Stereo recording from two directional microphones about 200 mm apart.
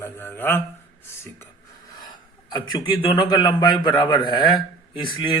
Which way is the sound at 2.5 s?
20° left (ahead or behind).